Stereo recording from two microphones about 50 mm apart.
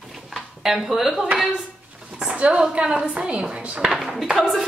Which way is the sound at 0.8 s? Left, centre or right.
Centre.